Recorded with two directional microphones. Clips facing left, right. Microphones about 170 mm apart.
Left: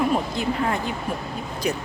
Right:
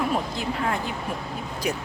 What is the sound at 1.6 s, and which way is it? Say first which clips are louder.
Speech: left 2 dB; 10° right (ahead or behind).